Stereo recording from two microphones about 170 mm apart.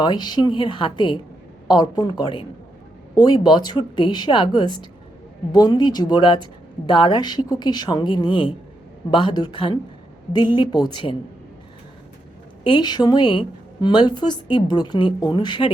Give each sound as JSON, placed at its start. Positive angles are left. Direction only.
{"t": 0.0, "sound": "a woman's voice", "side_deg": 25}
{"t": 12.6, "sound": "a woman's voice", "side_deg": 25}